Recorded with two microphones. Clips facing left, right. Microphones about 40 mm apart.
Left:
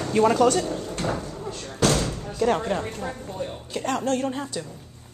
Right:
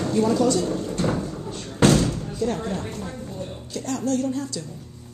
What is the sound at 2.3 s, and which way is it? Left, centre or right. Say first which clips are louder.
Speech: left 3 dB; left.